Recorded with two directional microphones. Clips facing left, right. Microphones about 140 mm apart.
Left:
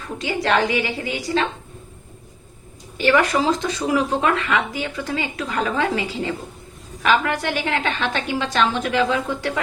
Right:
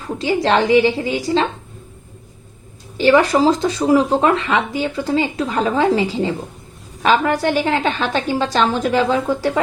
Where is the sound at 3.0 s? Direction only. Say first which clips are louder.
Right 5 dB; 30° right (ahead or behind).